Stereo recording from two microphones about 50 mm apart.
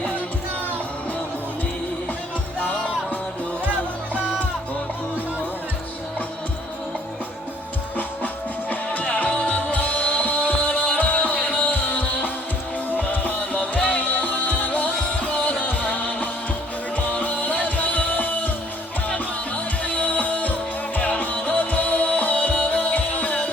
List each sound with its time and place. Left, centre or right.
2.6 s music: left
8.7 s music: left